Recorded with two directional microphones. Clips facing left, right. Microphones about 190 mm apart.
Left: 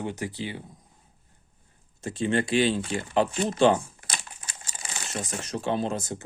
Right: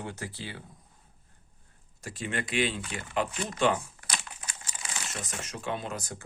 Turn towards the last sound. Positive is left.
turn(degrees=25)  # may be behind; listen again after turning